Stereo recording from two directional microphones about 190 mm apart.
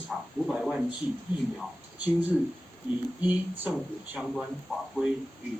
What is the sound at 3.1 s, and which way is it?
Speech, 10° right (ahead or behind).